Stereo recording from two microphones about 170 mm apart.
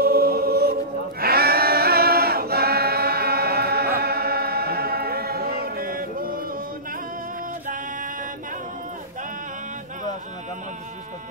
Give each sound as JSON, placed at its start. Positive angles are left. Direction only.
{"t": 0.0, "sound": "music", "side_deg": -65}
{"t": 1.2, "sound": "choir", "side_deg": -65}